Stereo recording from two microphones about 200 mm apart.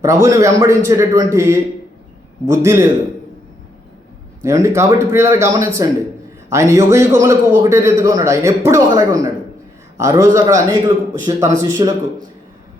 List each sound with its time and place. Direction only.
0.0 s a man's voice: 15° right (ahead or behind)
4.4 s a man's voice: 15° right (ahead or behind)